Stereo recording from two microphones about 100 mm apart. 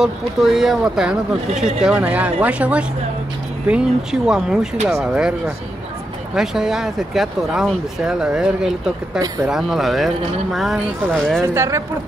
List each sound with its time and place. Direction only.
0.0 s speech: 5° right (ahead or behind)
6.3 s speech: 5° right (ahead or behind)
11.4 s speech: 30° right (ahead or behind)